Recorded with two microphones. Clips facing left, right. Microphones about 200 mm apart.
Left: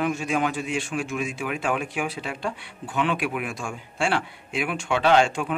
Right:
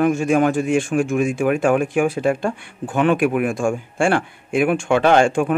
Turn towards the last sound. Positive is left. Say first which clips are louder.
# right 5 dB
turn(degrees=-50)  # may be behind; listen again after turning